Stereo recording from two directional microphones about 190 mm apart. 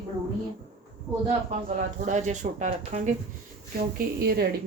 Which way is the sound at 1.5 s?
40° right (ahead or behind).